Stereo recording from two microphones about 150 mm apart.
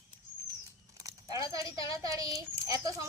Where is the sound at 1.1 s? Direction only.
25° right (ahead or behind).